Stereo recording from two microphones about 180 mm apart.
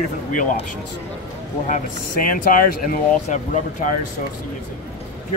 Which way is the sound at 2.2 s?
50° left (ahead or behind).